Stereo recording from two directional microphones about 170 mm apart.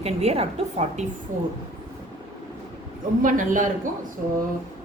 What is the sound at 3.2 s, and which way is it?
Speech, 50° right (ahead or behind).